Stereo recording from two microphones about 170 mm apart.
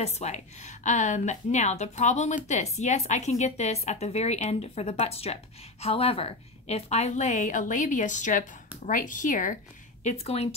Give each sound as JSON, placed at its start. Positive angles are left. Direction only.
{"t": 0.0, "sound": "a woman's voice", "side_deg": 40}
{"t": 10.0, "sound": "a woman's voice", "side_deg": 35}